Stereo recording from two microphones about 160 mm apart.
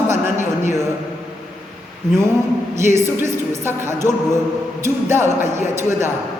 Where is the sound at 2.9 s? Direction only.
15° right (ahead or behind).